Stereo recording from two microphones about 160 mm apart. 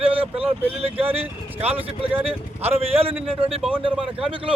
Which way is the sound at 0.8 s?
35° right (ahead or behind).